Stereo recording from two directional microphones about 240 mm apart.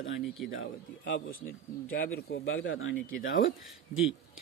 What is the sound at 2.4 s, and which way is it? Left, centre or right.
Speech, left.